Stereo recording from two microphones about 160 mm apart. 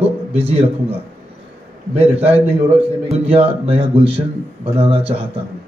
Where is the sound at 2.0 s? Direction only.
40° right (ahead or behind).